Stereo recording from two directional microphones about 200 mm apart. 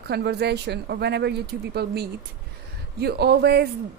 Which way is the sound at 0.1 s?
55° right (ahead or behind).